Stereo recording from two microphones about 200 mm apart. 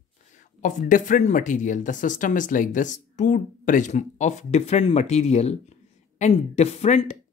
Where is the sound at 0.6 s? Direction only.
40° left (ahead or behind).